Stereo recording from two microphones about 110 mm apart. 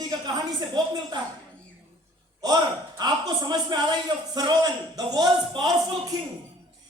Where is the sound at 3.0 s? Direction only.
40° right (ahead or behind).